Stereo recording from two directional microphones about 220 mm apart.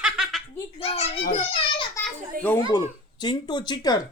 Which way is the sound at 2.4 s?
40° right (ahead or behind).